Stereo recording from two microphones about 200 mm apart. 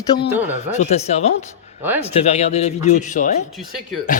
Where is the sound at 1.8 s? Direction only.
10° right (ahead or behind).